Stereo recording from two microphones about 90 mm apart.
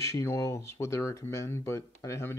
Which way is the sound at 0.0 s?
35° left (ahead or behind).